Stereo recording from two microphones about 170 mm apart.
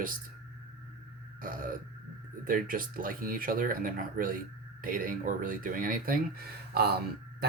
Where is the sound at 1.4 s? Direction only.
55° right (ahead or behind).